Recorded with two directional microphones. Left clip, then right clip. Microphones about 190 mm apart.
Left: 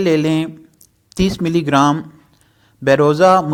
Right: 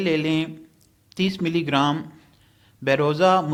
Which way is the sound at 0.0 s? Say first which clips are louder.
Left 7 dB; 45° left (ahead or behind).